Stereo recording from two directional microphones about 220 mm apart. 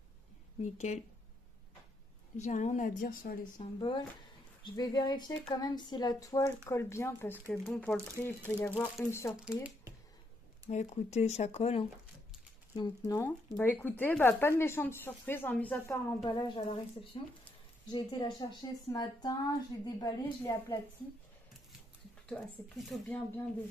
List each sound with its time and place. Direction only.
0.7 s speech: 30° left (ahead or behind)
2.3 s speech: 30° left (ahead or behind)
3.5 s a woman's voice: 20° left (ahead or behind)
9.4 s speech: 5° right (ahead or behind)
10.7 s speech: 30° left (ahead or behind); by 16.2 s 10° left (ahead or behind)
16.3 s a woman's voice: 20° left (ahead or behind)
22.3 s speech: 5° left (ahead or behind)